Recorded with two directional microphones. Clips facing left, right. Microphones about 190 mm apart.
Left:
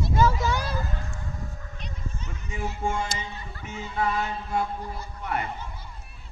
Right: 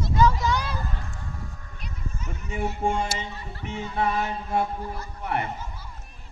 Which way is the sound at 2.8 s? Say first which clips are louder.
Right 2 dB; 35° right (ahead or behind).